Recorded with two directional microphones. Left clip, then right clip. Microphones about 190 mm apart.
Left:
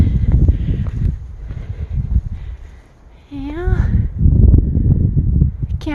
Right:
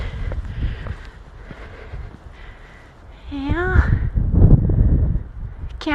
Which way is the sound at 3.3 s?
20° left (ahead or behind).